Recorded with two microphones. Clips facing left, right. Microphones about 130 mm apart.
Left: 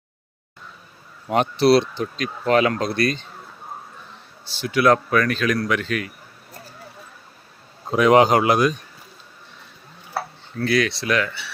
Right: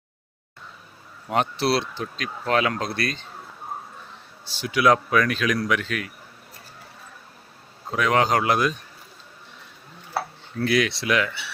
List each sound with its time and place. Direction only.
1.3 s speech: centre (ahead or behind)
4.4 s a man's voice: 10° right (ahead or behind)
7.9 s speech: 20° left (ahead or behind); by 8.7 s 5° left (ahead or behind)
10.7 s a man's voice: 15° right (ahead or behind)